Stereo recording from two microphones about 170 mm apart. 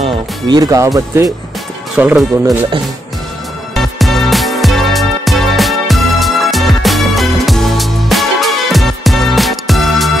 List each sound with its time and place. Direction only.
0.5 s speech: 20° right (ahead or behind)
2.0 s speech: 10° right (ahead or behind)
3.7 s music: centre (ahead or behind)